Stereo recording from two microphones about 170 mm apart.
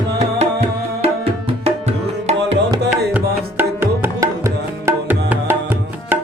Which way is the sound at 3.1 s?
10° right (ahead or behind).